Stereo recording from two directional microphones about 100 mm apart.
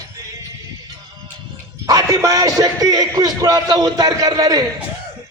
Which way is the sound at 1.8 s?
35° right (ahead or behind).